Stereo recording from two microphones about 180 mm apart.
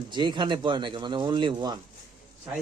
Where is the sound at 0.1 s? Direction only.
25° right (ahead or behind).